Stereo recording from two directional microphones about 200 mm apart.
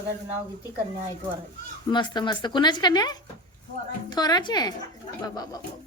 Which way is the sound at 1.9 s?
20° left (ahead or behind).